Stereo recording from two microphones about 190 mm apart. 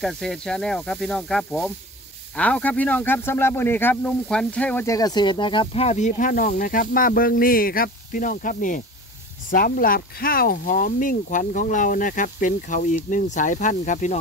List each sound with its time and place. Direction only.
0.0 s speech: centre (ahead or behind); by 14.2 s 40° left (ahead or behind)